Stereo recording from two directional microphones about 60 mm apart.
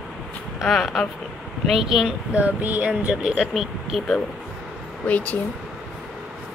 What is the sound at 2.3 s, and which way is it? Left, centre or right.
Speech, right.